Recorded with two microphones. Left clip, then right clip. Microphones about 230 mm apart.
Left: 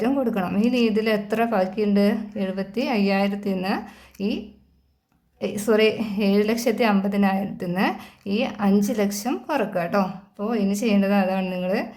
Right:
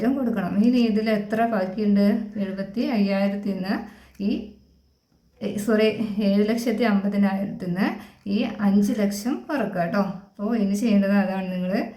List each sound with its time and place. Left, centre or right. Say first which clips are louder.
0.0 s a woman's voice: left 2 dB; left
5.4 s a woman's voice: left 2 dB; left